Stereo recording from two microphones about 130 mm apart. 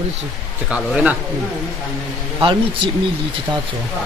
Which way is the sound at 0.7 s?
10° right (ahead or behind).